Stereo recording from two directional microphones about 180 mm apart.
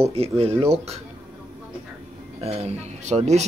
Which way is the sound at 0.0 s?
35° right (ahead or behind).